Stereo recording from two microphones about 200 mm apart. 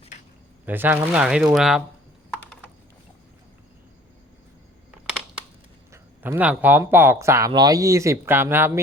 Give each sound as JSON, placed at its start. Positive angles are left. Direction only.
{"t": 0.6, "sound": "speech", "side_deg": -10}
{"t": 5.9, "sound": "speech", "side_deg": -10}